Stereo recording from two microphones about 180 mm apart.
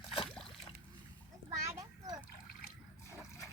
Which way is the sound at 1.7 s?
20° right (ahead or behind).